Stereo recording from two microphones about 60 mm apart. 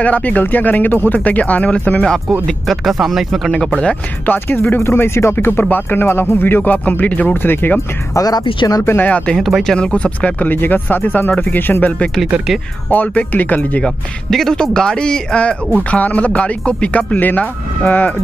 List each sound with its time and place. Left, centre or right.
0.0 s speech: left
2.4 s speech: centre
3.5 s speech: centre
4.3 s speech: left
8.1 s speech: left
8.8 s speech: left
9.1 s speech: centre
12.9 s speech: left
14.3 s speech: centre; by 18.1 s left